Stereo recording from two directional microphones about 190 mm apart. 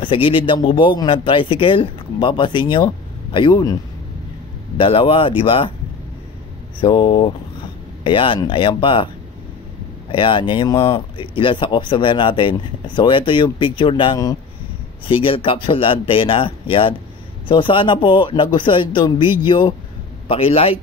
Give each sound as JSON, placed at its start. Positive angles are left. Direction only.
{"t": 0.0, "sound": "speech", "side_deg": 25}
{"t": 4.7, "sound": "speech", "side_deg": 25}
{"t": 6.8, "sound": "speech", "side_deg": 25}
{"t": 10.1, "sound": "speech", "side_deg": 25}